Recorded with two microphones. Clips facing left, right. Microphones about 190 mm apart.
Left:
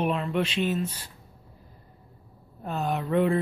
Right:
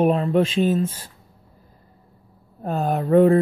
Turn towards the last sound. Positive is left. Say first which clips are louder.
# right 9 dB
turn(degrees=-40)  # may be behind; listen again after turning